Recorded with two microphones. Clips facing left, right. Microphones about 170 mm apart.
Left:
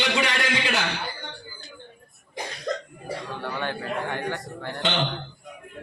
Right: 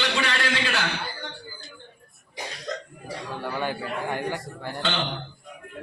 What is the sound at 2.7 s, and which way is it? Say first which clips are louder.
Cough: left 4 dB; 55° left (ahead or behind).